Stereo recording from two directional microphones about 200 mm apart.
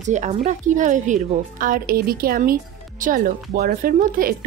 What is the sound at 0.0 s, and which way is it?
Speech, 35° right (ahead or behind).